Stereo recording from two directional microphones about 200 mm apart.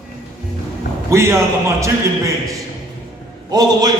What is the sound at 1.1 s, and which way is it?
A man's voice, 15° right (ahead or behind).